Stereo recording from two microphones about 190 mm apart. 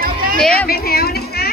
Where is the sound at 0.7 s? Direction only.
55° left (ahead or behind).